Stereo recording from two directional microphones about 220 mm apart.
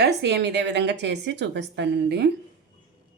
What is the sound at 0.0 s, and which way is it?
A woman's voice, 50° right (ahead or behind).